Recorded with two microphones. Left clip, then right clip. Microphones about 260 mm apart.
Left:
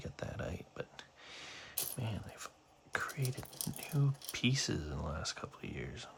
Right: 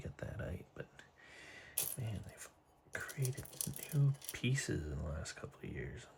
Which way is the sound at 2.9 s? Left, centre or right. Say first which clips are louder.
Left 5 dB; centre.